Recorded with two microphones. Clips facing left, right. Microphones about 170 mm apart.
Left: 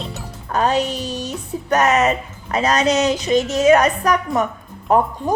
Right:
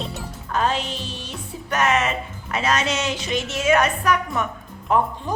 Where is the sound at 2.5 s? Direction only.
40° left (ahead or behind).